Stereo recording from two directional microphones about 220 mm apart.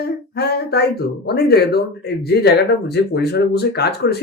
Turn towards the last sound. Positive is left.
turn(degrees=45)  # may be behind; listen again after turning